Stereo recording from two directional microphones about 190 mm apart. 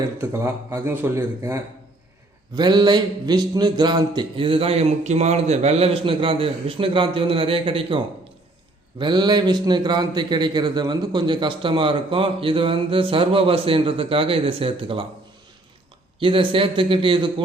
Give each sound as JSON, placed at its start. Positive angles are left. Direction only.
{"t": 0.2, "sound": "a man's voice", "side_deg": -15}
{"t": 16.2, "sound": "a man's voice", "side_deg": -25}